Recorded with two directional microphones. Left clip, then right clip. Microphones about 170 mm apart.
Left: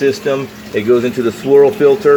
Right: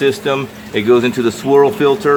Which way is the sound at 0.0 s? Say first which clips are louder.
Even; 25° right (ahead or behind).